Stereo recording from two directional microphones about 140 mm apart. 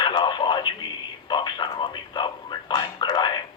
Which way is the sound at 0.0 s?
30° left (ahead or behind).